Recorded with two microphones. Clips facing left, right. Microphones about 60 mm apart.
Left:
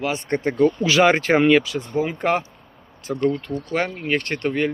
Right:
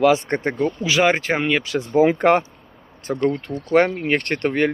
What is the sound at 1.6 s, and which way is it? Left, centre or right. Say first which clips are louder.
Speech: right 7 dB; right.